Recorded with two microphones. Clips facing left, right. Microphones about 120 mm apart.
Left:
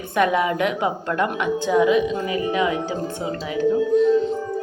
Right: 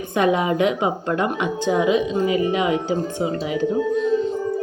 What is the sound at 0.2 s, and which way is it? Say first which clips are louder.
A woman's voice: right 1 dB; 25° right (ahead or behind).